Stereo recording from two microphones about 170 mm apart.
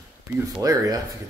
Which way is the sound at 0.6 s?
20° right (ahead or behind).